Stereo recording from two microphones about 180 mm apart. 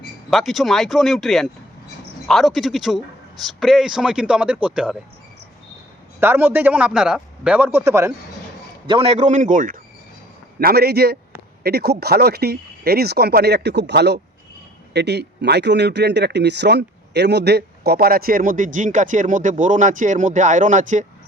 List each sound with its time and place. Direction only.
0.3 s speech: centre (ahead or behind)
6.1 s a man's voice: 10° right (ahead or behind)
8.9 s a man's voice: 30° right (ahead or behind)
10.6 s speech: 55° right (ahead or behind)